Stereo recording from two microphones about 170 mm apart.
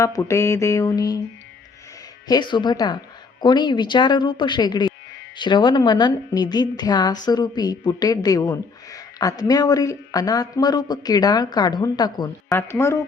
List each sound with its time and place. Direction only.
0.0 s mantra: 20° left (ahead or behind)
2.2 s a woman's voice: 25° left (ahead or behind)
12.5 s mantra: 15° left (ahead or behind)